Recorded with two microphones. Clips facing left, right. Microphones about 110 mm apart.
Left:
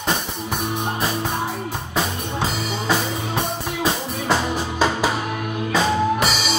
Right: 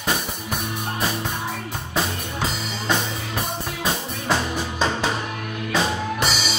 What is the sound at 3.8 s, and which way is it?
Music, 5° left (ahead or behind).